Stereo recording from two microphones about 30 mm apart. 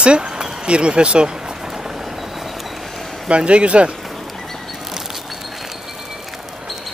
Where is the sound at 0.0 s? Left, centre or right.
Right.